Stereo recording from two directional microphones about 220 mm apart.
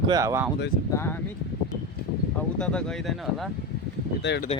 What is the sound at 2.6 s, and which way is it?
Speech, 5° left (ahead or behind).